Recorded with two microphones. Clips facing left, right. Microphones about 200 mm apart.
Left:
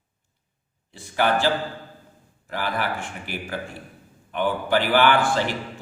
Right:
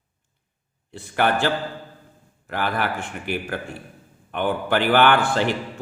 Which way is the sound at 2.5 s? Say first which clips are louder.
Right 2 dB; 60° right (ahead or behind).